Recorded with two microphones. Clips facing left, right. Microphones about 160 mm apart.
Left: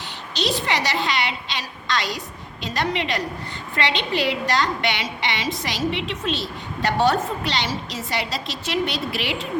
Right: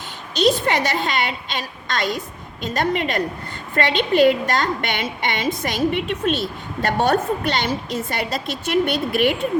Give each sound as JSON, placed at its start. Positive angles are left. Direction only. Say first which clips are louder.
{"t": 0.3, "sound": "a woman's voice", "louder": "right 6 dB", "side_deg": -50}